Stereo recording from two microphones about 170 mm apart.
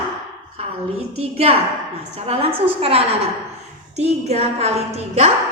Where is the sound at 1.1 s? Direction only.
35° right (ahead or behind).